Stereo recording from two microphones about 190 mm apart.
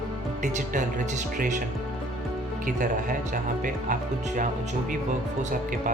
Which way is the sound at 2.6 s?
45° right (ahead or behind).